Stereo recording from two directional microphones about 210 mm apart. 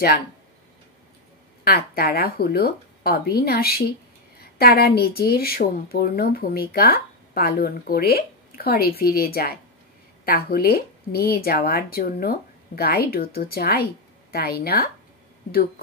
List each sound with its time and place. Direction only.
1.6 s a woman's voice: 45° left (ahead or behind)